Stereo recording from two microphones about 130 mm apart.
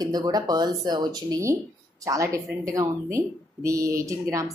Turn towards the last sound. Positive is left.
turn(degrees=-25)  # may be behind; listen again after turning